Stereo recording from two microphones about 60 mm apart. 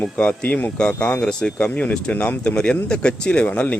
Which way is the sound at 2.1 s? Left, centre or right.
Left.